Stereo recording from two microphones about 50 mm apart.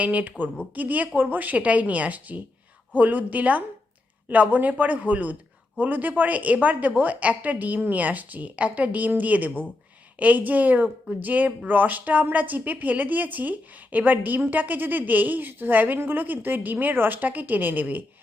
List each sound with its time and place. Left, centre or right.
0.0 s a woman's voice: right